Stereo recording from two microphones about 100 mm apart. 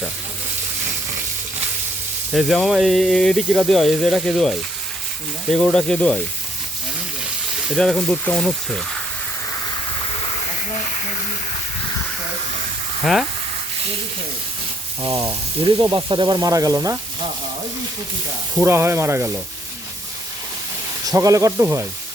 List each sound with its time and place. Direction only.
2.3 s speech: centre (ahead or behind)
5.7 s speech: 5° left (ahead or behind)
7.8 s speech: 5° left (ahead or behind)
15.0 s speech: 30° right (ahead or behind)
15.6 s speech: 45° right (ahead or behind)
18.6 s speech: 25° right (ahead or behind)
21.1 s speech: 35° right (ahead or behind)